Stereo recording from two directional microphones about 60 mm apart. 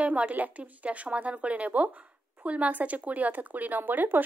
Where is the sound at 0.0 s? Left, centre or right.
Right.